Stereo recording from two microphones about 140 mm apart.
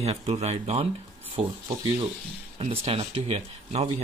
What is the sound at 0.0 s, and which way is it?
Speech, 45° right (ahead or behind).